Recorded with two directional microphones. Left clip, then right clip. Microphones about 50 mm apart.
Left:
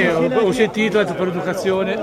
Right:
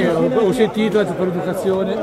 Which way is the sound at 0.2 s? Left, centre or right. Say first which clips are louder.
Right 1 dB; centre.